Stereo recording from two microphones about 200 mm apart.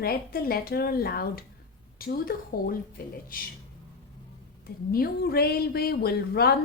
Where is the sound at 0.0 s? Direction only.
50° left (ahead or behind).